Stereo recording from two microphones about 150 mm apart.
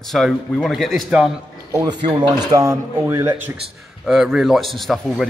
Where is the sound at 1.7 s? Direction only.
30° right (ahead or behind).